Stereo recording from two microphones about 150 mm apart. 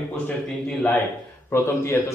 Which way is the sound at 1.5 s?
15° left (ahead or behind).